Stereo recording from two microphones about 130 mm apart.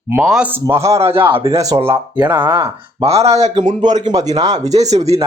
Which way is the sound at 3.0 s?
55° right (ahead or behind).